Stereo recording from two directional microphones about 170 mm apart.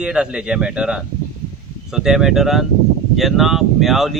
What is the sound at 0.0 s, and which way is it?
Speech, 5° right (ahead or behind).